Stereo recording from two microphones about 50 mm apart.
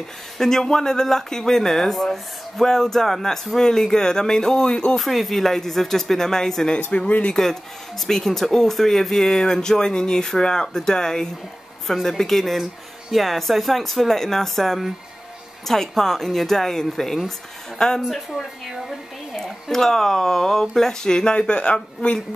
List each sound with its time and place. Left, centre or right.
0.4 s speech: centre
4.9 s speech: centre
6.9 s speech: left
8.1 s speech: centre
18.0 s speech: centre; by 22.2 s left